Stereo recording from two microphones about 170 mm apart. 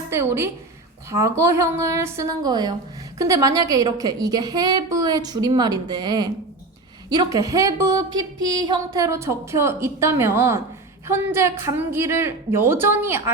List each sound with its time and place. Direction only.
0.1 s a woman's voice: 15° right (ahead or behind)